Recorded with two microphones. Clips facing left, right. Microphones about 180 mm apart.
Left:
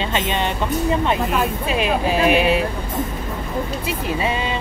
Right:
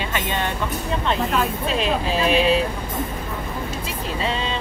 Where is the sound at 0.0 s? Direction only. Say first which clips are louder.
Left 3 dB; 20° left (ahead or behind).